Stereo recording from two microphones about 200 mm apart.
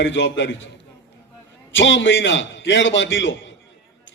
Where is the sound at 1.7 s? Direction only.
65° left (ahead or behind).